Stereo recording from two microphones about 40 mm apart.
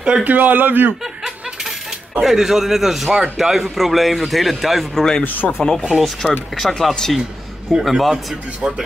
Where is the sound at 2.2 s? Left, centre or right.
Centre.